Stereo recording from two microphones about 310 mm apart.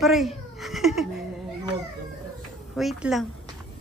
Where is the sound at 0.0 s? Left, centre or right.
Centre.